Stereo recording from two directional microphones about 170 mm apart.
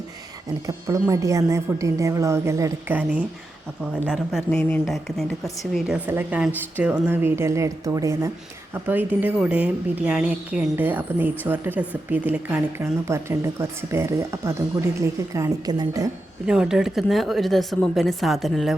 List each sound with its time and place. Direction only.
0.7 s speech: 20° right (ahead or behind); by 4.6 s centre (ahead or behind)
6.1 s speech: 10° right (ahead or behind)
16.5 s speech: 5° right (ahead or behind)